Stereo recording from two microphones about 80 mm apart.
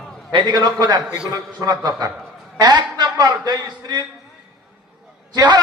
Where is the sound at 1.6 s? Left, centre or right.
Right.